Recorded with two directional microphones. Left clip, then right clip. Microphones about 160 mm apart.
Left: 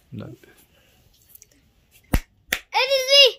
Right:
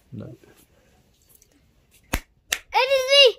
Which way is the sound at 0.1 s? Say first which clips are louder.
Left 1 dB; 10° left (ahead or behind).